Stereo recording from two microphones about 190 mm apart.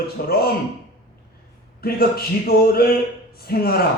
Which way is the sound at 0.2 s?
55° left (ahead or behind).